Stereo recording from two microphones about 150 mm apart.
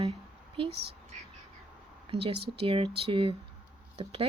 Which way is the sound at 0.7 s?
90° right.